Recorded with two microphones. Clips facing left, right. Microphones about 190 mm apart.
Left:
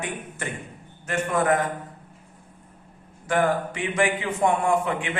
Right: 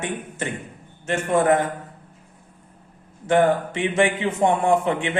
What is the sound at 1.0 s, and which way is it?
Speech, 25° right (ahead or behind).